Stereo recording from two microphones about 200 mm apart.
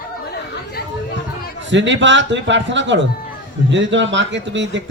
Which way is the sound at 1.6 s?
65° right (ahead or behind).